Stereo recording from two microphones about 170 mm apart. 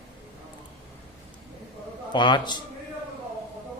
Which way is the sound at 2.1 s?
25° left (ahead or behind).